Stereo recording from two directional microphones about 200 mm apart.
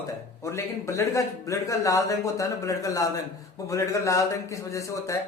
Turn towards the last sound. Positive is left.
turn(degrees=15)  # may be behind; listen again after turning